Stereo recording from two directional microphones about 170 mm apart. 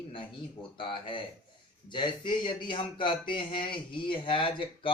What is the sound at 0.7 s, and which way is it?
Speech, 30° left (ahead or behind).